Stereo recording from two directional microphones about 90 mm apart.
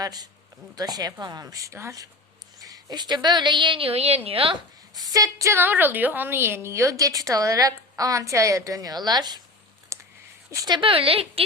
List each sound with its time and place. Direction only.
0.0 s a woman's voice: 45° right (ahead or behind); by 4.6 s 85° right
4.9 s a woman's voice: 45° right (ahead or behind)
9.9 s a sound: 30° right (ahead or behind)
10.7 s a woman's voice: 70° right (ahead or behind); by 11.4 s 90° right